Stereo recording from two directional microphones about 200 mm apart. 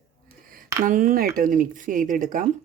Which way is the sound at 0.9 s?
40° right (ahead or behind).